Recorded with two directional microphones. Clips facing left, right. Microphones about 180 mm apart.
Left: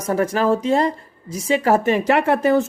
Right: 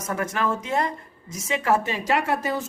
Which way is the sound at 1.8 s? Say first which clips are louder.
Left 8 dB; 55° left (ahead or behind).